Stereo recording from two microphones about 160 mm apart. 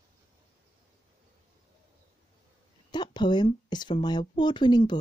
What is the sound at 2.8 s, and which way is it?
Speech, 30° left (ahead or behind).